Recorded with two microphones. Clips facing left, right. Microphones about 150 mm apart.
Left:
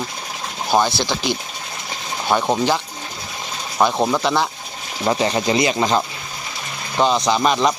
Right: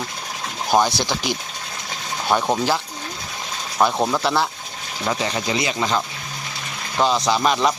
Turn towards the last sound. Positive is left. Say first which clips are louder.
# left 2 dB
turn(degrees=0)  # may be behind; listen again after turning